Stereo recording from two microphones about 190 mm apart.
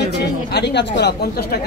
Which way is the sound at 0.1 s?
60° left (ahead or behind).